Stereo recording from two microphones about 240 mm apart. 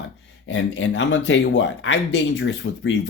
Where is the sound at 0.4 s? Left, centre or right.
Left.